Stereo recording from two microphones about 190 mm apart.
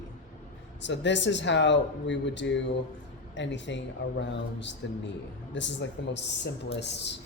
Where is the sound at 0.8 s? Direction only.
70° left (ahead or behind).